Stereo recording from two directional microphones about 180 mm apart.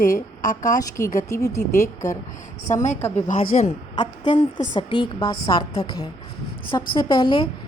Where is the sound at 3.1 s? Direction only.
35° left (ahead or behind).